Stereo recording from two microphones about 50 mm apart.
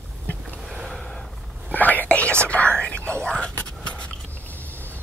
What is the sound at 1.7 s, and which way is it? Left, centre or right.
Whispering, left.